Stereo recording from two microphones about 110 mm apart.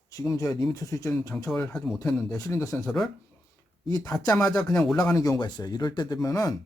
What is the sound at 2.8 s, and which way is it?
Speech, 5° left (ahead or behind).